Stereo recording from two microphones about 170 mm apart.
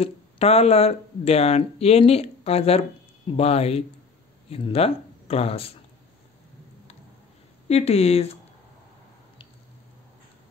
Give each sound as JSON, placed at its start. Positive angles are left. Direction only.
{"t": 0.0, "sound": "speech", "side_deg": 35}
{"t": 7.6, "sound": "speech", "side_deg": 40}